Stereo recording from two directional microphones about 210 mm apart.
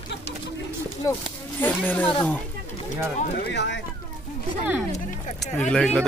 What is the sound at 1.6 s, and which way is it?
Speech, 10° left (ahead or behind).